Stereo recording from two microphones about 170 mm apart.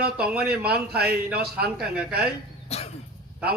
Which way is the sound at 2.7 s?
40° left (ahead or behind).